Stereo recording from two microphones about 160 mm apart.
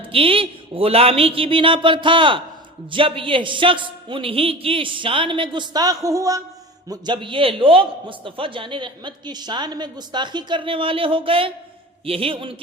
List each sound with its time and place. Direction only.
0.1 s a man's voice: 35° right (ahead or behind)